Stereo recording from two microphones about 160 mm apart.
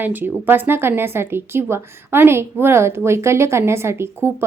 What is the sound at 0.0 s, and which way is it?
Speech, 10° right (ahead or behind).